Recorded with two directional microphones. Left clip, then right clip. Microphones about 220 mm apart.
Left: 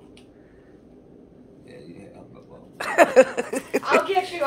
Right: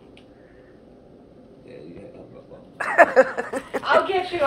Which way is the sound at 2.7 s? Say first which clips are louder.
Even; 30° left (ahead or behind).